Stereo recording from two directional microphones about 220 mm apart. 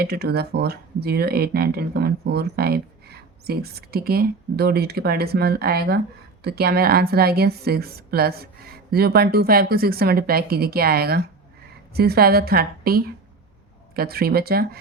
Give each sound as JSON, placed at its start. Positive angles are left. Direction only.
{"t": 0.0, "sound": "speech", "side_deg": -45}